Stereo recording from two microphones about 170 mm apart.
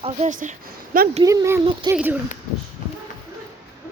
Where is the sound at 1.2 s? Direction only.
15° right (ahead or behind).